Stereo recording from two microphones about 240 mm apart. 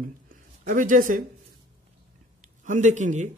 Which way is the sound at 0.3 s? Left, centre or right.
Right.